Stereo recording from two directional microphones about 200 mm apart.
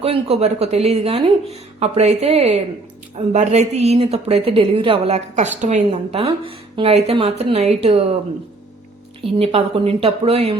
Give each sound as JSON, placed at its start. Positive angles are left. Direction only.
{"t": 0.0, "sound": "speech", "side_deg": -30}
{"t": 9.2, "sound": "speech", "side_deg": -30}